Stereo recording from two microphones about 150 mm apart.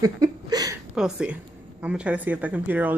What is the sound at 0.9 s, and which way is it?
Speech, 5° right (ahead or behind).